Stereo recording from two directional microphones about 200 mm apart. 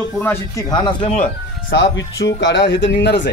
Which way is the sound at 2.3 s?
60° left (ahead or behind).